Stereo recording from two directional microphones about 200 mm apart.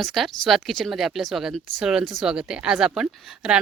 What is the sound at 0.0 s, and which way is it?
Speech, centre (ahead or behind).